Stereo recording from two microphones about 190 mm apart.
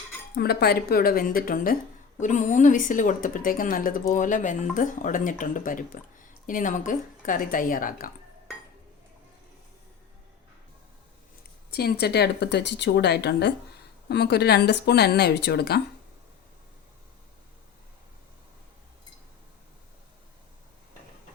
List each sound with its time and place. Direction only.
0.3 s speech: 55° left (ahead or behind)
11.7 s speech: 55° left (ahead or behind)